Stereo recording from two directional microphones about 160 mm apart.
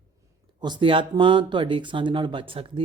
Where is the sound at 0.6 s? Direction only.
30° right (ahead or behind).